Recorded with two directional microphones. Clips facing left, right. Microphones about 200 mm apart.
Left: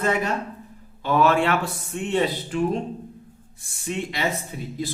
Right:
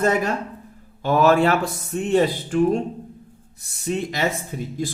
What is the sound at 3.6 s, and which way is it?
Speech, 40° right (ahead or behind).